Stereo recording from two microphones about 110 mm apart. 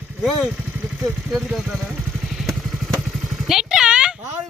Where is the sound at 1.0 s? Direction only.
5° right (ahead or behind).